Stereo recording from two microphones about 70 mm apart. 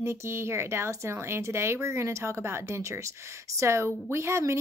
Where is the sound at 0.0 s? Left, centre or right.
Right.